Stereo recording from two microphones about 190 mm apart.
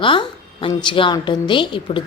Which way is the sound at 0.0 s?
25° left (ahead or behind).